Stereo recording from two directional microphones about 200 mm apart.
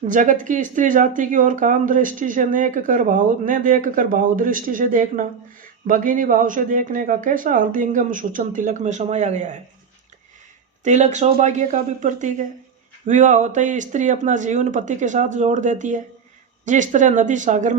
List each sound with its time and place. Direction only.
0.1 s speech: 40° right (ahead or behind)
10.8 s speech: 35° right (ahead or behind)